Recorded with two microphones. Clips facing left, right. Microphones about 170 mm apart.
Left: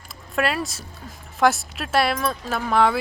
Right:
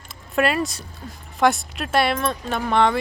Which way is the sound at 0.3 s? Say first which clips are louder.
Right 3 dB; centre (ahead or behind).